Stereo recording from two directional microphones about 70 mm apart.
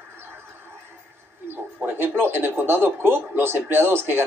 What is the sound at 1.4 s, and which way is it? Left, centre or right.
Speech, right.